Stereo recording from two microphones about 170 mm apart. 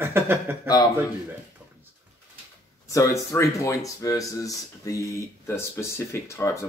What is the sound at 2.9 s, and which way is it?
Speech, 20° left (ahead or behind).